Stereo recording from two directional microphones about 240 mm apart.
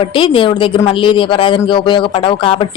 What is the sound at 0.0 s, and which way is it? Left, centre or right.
A woman's voice, left.